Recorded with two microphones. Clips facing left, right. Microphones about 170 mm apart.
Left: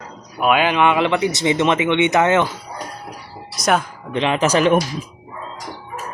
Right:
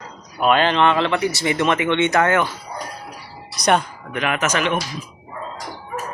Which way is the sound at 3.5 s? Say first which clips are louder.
Even; centre (ahead or behind).